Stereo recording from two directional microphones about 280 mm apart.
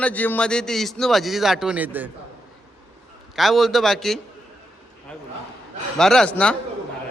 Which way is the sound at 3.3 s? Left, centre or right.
Centre.